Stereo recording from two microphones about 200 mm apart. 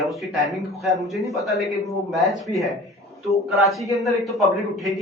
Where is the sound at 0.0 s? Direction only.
Centre (ahead or behind).